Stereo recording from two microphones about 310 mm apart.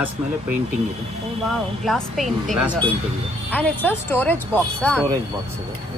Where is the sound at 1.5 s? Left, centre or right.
Centre.